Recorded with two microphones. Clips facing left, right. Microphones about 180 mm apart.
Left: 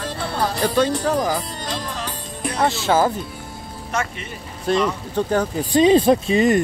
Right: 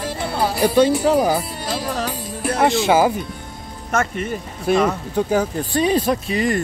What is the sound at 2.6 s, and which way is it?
Speech, 15° right (ahead or behind).